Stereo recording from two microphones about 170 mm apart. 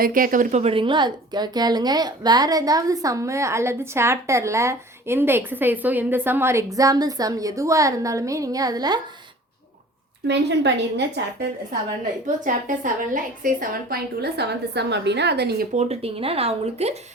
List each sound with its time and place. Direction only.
0.0 s a woman's voice: 55° right (ahead or behind); by 9.0 s 25° right (ahead or behind)
10.2 s a woman's voice: 90° right
12.5 s a woman's voice: 50° right (ahead or behind); by 15.6 s 75° right (ahead or behind)
15.7 s speech: 40° right (ahead or behind)